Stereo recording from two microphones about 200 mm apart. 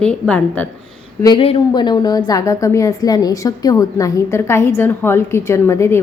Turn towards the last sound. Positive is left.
turn(degrees=15)  # may be behind; listen again after turning